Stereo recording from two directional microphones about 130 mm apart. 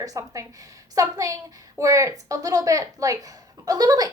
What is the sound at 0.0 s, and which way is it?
A woman's voice, 25° right (ahead or behind).